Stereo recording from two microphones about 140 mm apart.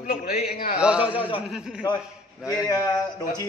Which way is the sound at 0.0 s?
90° left.